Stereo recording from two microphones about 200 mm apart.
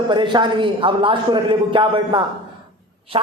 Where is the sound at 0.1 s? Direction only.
20° right (ahead or behind).